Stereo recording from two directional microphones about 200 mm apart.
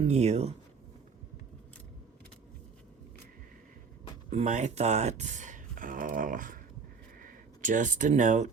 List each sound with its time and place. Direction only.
0.0 s speech: 35° right (ahead or behind)
4.3 s speech: 35° right (ahead or behind)